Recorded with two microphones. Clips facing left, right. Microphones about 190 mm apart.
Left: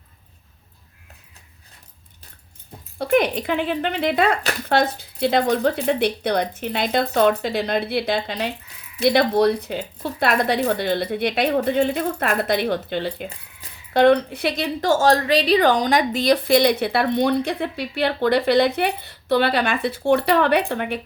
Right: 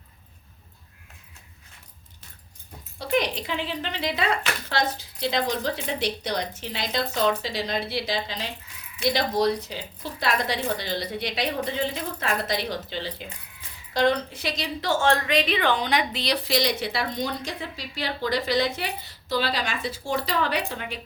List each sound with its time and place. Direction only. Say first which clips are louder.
3.0 s a woman's voice: left 6 dB; 55° left (ahead or behind)